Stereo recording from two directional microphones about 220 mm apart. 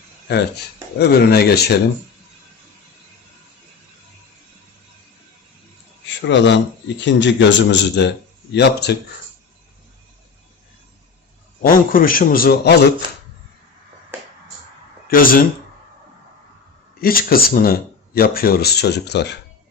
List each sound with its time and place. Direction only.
0.3 s speech: 50° left (ahead or behind)
6.1 s speech: 55° left (ahead or behind)
11.6 s a man's voice: 40° left (ahead or behind)
15.0 s speech: 40° left (ahead or behind)
17.0 s speech: 40° left (ahead or behind)